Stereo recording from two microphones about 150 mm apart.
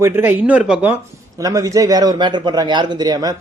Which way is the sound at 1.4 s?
25° right (ahead or behind).